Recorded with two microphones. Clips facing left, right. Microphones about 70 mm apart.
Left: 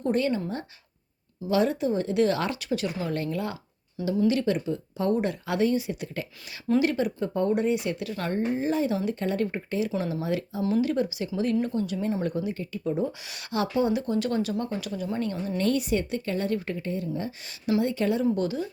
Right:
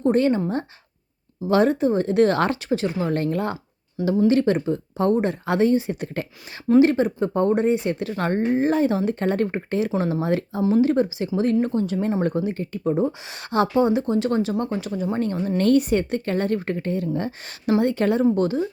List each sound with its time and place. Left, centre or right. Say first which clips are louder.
0.0 s a woman's voice: right 6 dB; right
2.6 s speech: right 5 dB; right
6.7 s speech: right 7 dB; right
8.3 s a woman's voice: right 6 dB; right
10.6 s speech: right 6 dB; right
15.5 s a woman's voice: right 7 dB; right